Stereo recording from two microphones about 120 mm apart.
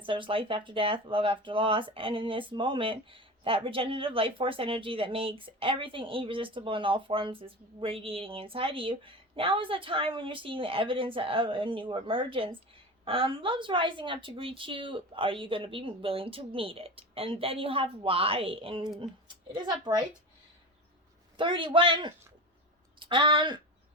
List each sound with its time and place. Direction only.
0.0 s speech: 45° right (ahead or behind)
21.3 s speech: 45° right (ahead or behind)